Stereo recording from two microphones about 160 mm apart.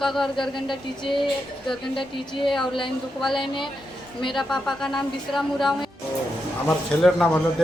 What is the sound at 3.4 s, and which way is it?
Speech, 30° left (ahead or behind).